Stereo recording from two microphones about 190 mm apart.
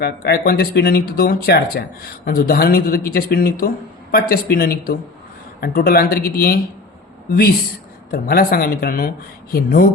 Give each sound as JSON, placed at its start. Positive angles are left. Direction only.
{"t": 0.0, "sound": "speech", "side_deg": 55}
{"t": 8.1, "sound": "speech", "side_deg": 50}